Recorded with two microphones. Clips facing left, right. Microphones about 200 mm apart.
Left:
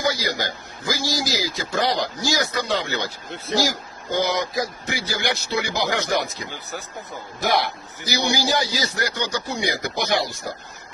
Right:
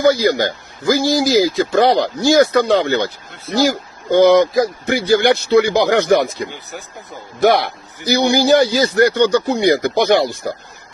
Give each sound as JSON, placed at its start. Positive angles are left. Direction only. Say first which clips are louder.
{"t": 0.0, "sound": "speech", "louder": "right 11 dB", "side_deg": -55}
{"t": 7.3, "sound": "speech", "louder": "right 9 dB", "side_deg": -60}